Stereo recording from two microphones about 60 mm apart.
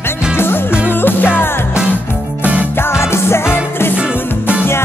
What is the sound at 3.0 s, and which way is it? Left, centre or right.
Music, left.